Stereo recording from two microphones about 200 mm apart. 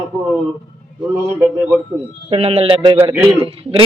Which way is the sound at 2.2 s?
30° right (ahead or behind).